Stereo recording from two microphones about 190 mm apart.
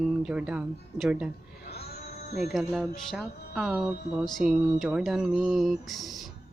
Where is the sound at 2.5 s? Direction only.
Centre (ahead or behind).